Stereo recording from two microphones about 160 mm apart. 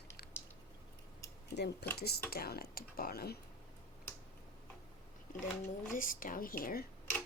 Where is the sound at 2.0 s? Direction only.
80° left.